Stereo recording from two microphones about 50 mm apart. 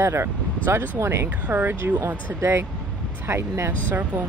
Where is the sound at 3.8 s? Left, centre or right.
Right.